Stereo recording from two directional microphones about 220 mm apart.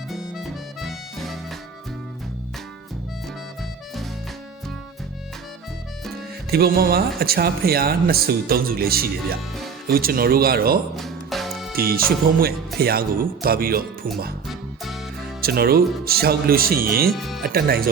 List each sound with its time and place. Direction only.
0.1 s harmonica: centre (ahead or behind)
6.5 s speech: 45° right (ahead or behind)
10.9 s music: centre (ahead or behind)
11.7 s speech: 45° right (ahead or behind)
15.4 s speech: 45° right (ahead or behind)
17.2 s speech: centre (ahead or behind)
17.4 s speech: 45° right (ahead or behind)